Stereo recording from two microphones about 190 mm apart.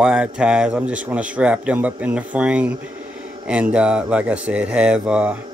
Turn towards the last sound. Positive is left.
turn(degrees=-5)  # may be behind; listen again after turning